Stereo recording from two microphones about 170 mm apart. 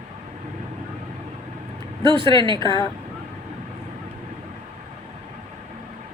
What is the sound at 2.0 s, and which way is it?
Speech, 30° right (ahead or behind).